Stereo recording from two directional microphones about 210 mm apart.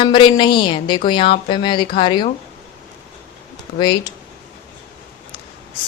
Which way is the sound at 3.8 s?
20° left (ahead or behind).